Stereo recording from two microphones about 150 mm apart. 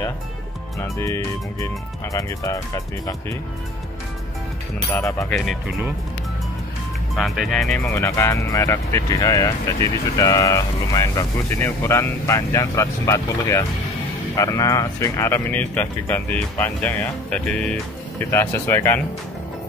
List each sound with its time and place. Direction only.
0.7 s speech: 15° left (ahead or behind)
4.8 s speech: 20° left (ahead or behind)
5.4 s speech: centre (ahead or behind)
7.2 s speech: centre (ahead or behind)
7.9 s speech: 20° left (ahead or behind)